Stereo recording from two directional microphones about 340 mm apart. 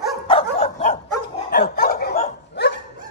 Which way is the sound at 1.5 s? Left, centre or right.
Left.